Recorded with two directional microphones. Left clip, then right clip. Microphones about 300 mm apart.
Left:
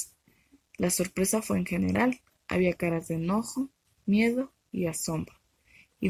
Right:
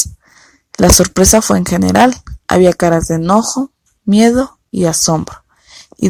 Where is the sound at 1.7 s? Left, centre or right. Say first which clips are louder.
Right 18 dB; right.